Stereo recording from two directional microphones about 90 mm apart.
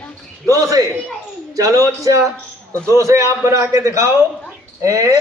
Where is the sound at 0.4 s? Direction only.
40° right (ahead or behind).